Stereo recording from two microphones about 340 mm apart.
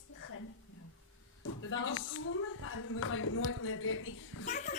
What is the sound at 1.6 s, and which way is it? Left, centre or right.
A man's voice, left.